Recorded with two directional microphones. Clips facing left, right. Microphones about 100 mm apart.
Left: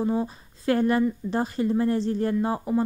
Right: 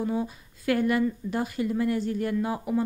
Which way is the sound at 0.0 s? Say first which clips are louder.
Left 3 dB; 30° left (ahead or behind).